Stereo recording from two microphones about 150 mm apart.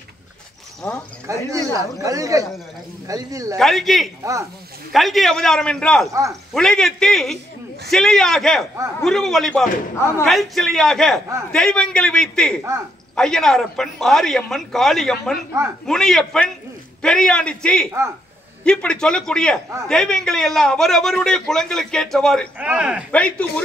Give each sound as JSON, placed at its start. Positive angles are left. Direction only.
{"t": 0.8, "sound": "speech", "side_deg": 10}
{"t": 1.2, "sound": "speech", "side_deg": -20}
{"t": 3.5, "sound": "a man's voice", "side_deg": 0}
{"t": 4.2, "sound": "speech", "side_deg": -20}
{"t": 4.9, "sound": "a man's voice", "side_deg": 0}
{"t": 22.6, "sound": "speech", "side_deg": -10}
{"t": 23.1, "sound": "speech", "side_deg": 10}